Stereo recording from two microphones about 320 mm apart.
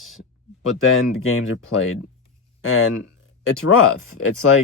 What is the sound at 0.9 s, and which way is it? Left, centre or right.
Speech, left.